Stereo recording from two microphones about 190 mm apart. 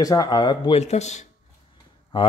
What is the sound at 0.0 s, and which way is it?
A man's voice, 20° left (ahead or behind).